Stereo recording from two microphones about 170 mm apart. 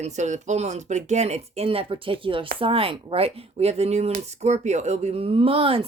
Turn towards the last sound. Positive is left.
turn(degrees=-35)  # may be behind; listen again after turning